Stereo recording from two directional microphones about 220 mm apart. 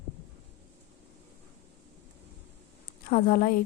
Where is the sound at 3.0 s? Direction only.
40° left (ahead or behind).